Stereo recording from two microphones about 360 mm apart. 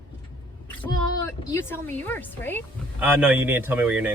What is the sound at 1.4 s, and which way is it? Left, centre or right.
Speech, centre.